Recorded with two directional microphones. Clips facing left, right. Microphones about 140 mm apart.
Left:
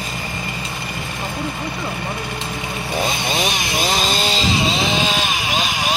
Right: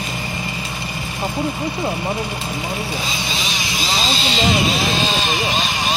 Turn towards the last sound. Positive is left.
turn(degrees=20)  # may be behind; listen again after turning